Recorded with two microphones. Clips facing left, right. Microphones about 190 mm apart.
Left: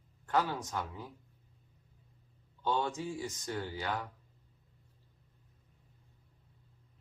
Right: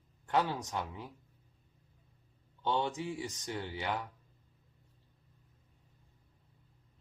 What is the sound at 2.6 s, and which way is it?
Speech, 20° right (ahead or behind).